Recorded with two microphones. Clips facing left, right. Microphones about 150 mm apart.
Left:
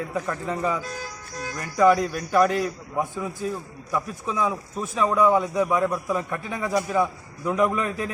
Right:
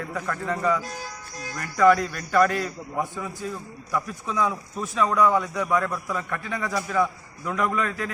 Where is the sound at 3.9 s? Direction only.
15° left (ahead or behind).